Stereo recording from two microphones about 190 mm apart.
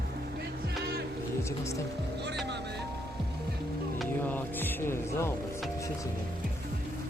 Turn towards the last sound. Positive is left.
turn(degrees=15)  # may be behind; listen again after turning